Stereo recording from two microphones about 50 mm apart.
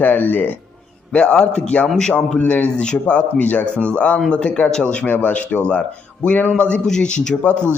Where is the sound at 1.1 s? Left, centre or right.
Centre.